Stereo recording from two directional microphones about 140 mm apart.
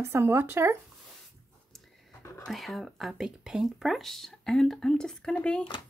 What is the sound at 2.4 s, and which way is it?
Speech, centre (ahead or behind).